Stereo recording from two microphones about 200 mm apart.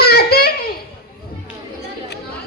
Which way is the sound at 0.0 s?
55° left (ahead or behind).